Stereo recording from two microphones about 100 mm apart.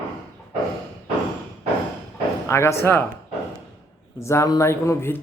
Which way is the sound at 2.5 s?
25° left (ahead or behind).